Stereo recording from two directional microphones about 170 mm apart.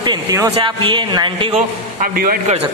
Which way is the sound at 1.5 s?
55° right (ahead or behind).